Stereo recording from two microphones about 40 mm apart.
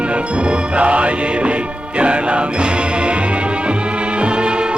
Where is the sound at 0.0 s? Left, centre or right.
Right.